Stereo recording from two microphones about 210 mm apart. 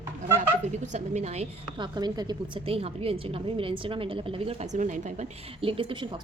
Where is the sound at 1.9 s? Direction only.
20° right (ahead or behind).